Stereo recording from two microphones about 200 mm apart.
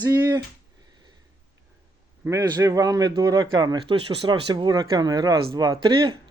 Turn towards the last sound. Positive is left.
turn(degrees=-25)  # may be behind; listen again after turning